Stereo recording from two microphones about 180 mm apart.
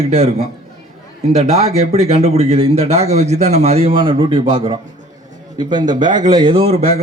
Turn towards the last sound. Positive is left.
turn(degrees=-35)  # may be behind; listen again after turning